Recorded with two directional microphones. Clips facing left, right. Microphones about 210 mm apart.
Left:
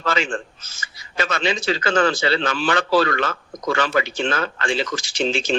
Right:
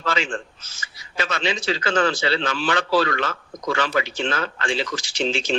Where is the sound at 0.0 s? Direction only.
50° left (ahead or behind).